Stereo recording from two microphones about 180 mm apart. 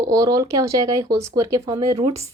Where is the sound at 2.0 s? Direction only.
35° right (ahead or behind).